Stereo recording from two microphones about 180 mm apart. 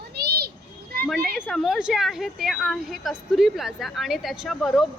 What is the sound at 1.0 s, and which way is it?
A woman's voice, centre (ahead or behind).